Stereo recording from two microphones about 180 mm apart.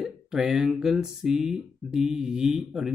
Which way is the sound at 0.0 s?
5° right (ahead or behind).